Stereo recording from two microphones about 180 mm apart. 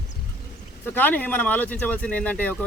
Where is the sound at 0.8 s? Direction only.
10° left (ahead or behind).